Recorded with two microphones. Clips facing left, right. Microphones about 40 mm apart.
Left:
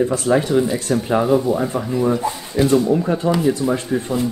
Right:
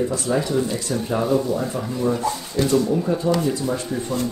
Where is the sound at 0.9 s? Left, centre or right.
Left.